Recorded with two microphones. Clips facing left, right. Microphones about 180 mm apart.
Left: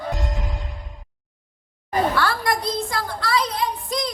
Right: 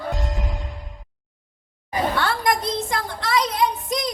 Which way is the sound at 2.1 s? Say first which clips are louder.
Even; 20° right (ahead or behind).